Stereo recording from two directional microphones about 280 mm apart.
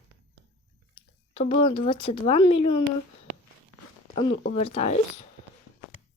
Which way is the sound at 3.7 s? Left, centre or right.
Left.